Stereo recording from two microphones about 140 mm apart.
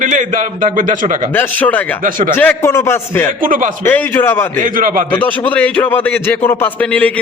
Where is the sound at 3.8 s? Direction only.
15° left (ahead or behind).